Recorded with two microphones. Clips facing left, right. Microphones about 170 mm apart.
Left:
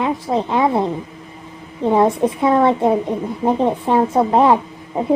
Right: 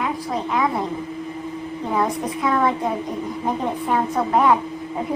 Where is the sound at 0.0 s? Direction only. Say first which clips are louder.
Left 5 dB; 30° left (ahead or behind).